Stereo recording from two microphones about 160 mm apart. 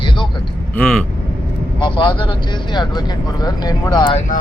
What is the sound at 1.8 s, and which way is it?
Speech, 30° left (ahead or behind).